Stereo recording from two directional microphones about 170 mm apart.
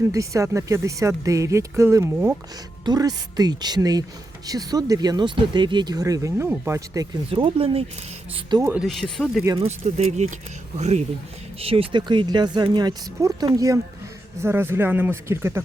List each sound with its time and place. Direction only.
0.1 s speech: 20° right (ahead or behind)
7.3 s speech: 30° right (ahead or behind)
8.8 s speech: centre (ahead or behind)
9.6 s speech: 40° right (ahead or behind); by 15.6 s 15° right (ahead or behind)